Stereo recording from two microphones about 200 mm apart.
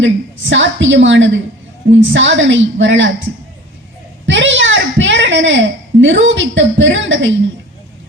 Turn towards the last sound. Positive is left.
turn(degrees=-70)  # may be behind; listen again after turning